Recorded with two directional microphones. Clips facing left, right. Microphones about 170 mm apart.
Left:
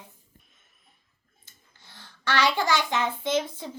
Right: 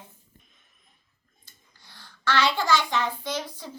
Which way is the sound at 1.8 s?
20° left (ahead or behind).